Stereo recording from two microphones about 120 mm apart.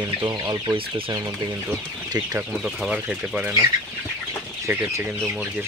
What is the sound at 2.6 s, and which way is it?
Speech, 5° right (ahead or behind).